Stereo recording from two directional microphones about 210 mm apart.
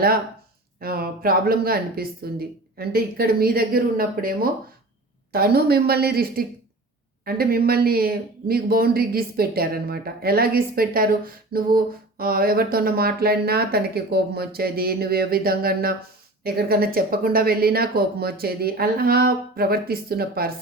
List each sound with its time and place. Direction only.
0.8 s speech: 45° right (ahead or behind)